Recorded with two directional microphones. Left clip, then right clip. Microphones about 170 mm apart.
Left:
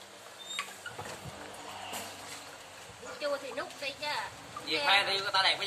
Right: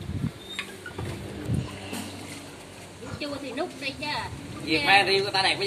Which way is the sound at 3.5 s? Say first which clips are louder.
Right 6 dB; 10° left (ahead or behind).